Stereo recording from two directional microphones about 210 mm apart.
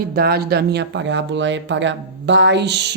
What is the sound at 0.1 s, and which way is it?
Speech, 45° right (ahead or behind).